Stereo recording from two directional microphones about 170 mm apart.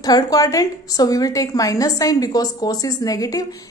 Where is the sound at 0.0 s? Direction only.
20° left (ahead or behind).